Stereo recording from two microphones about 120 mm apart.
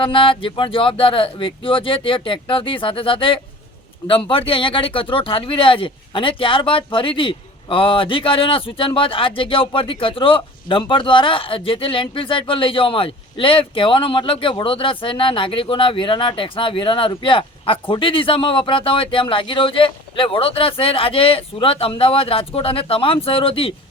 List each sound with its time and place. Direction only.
0.0 s speech: 45° left (ahead or behind)